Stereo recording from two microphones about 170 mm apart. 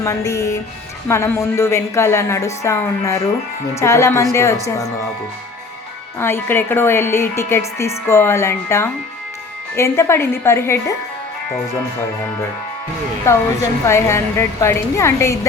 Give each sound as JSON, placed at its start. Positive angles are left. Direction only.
{"t": 0.0, "sound": "music", "side_deg": 20}
{"t": 1.0, "sound": "a woman's voice", "side_deg": 15}
{"t": 6.1, "sound": "a woman's voice", "side_deg": 15}
{"t": 13.2, "sound": "a woman's voice", "side_deg": 15}